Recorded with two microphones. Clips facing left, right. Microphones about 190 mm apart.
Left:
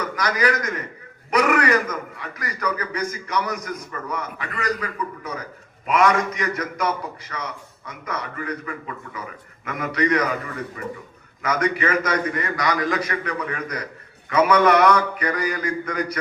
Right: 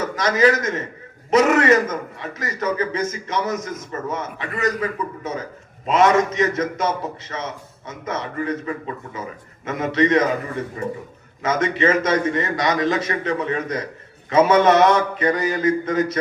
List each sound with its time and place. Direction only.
0.0 s a man's voice: 25° right (ahead or behind)